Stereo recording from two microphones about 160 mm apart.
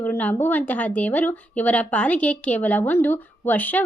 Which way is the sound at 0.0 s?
10° left (ahead or behind).